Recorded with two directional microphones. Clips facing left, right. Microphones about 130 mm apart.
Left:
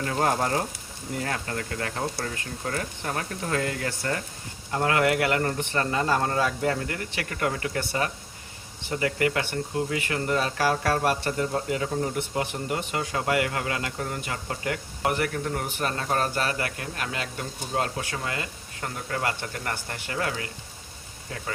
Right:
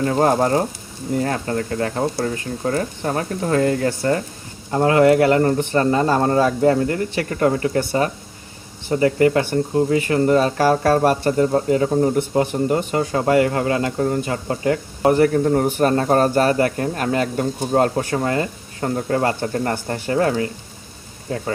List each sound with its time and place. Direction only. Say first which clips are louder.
0.0 s speech: right 8 dB; 35° right (ahead or behind)